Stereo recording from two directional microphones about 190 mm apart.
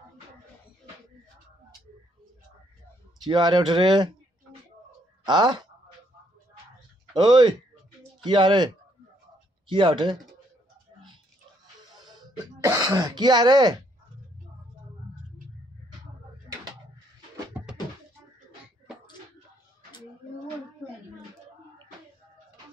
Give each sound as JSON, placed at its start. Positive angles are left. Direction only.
{"t": 3.3, "sound": "speech", "side_deg": -25}
{"t": 5.2, "sound": "speech", "side_deg": -20}
{"t": 7.2, "sound": "speech", "side_deg": -25}
{"t": 9.7, "sound": "speech", "side_deg": -25}
{"t": 11.9, "sound": "speech", "side_deg": -20}
{"t": 17.6, "sound": "music", "side_deg": -10}